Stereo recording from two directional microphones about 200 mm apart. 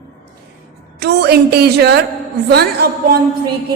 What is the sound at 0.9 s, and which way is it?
A woman's voice, 55° right (ahead or behind).